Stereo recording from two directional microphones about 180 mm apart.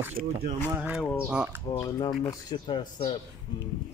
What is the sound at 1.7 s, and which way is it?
Speech, 20° left (ahead or behind).